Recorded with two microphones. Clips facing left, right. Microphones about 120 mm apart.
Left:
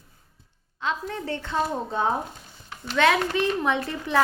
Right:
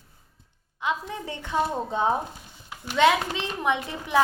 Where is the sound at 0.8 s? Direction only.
15° right (ahead or behind).